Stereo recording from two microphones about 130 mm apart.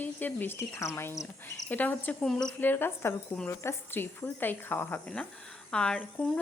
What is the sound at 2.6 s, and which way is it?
A woman's voice, 15° left (ahead or behind).